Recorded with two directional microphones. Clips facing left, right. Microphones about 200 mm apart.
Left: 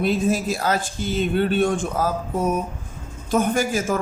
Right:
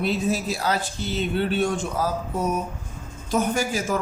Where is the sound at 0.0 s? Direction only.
50° left (ahead or behind).